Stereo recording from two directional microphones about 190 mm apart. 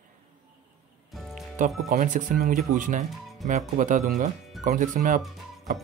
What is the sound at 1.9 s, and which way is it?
Speech, 45° right (ahead or behind).